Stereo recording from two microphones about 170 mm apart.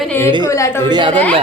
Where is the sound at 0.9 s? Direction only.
25° right (ahead or behind).